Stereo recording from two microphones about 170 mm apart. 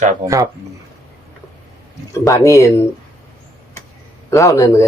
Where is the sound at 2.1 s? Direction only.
20° left (ahead or behind).